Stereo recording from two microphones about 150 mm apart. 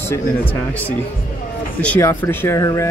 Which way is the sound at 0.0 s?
15° left (ahead or behind).